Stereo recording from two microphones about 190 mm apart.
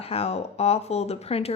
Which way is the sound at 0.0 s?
30° left (ahead or behind).